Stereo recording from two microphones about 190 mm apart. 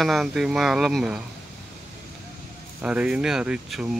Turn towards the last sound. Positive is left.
turn(degrees=0)  # may be behind; listen again after turning